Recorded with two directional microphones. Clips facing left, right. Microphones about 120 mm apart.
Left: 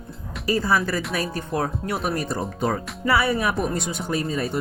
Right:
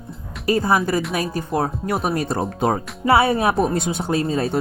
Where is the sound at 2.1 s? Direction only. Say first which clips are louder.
Right 4 dB; 25° right (ahead or behind).